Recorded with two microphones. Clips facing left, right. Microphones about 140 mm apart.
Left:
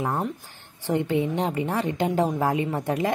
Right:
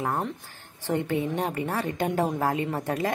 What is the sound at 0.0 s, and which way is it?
A woman's voice, 15° left (ahead or behind).